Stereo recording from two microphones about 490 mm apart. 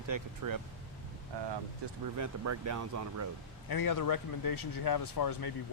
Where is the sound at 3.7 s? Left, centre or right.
Left.